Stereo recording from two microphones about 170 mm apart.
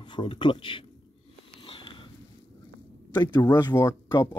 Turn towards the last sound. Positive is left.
turn(degrees=20)  # may be behind; listen again after turning